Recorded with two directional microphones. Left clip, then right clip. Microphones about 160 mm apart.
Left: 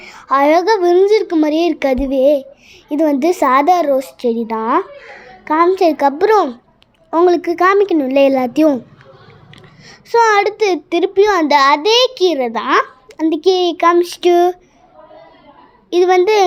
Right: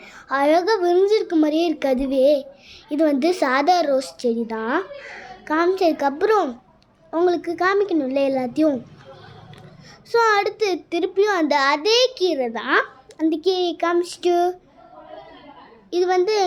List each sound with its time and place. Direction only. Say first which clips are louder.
0.0 s a child's voice: left 7 dB; 35° left (ahead or behind)
10.1 s a child's voice: left 6 dB; 30° left (ahead or behind)
15.9 s a child's voice: left 8 dB; 40° left (ahead or behind)